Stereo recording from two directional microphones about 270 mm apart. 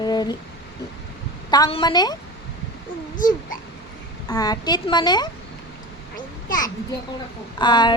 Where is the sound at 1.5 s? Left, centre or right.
Centre.